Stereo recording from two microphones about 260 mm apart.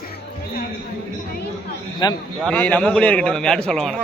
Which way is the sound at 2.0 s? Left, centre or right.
Centre.